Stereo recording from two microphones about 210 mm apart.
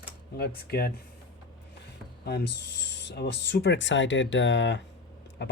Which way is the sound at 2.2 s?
50° left (ahead or behind).